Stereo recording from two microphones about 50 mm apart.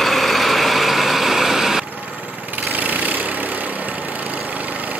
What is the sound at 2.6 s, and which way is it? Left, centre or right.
Vehicle, right.